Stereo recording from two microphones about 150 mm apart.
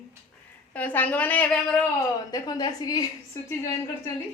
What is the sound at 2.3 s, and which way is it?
Speech, 25° left (ahead or behind).